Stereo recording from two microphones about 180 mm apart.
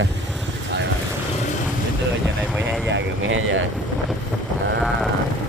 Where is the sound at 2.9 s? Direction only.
90° right.